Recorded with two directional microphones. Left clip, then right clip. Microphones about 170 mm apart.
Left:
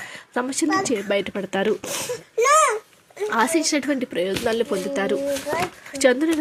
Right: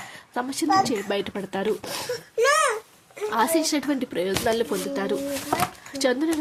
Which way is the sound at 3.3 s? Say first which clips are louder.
Left 2 dB; 15° left (ahead or behind).